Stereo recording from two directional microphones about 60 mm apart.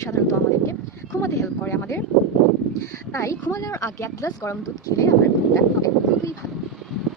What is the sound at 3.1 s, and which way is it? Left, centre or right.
Speech, left.